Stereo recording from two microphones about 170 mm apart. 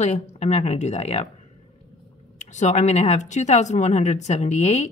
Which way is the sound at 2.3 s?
45° left (ahead or behind).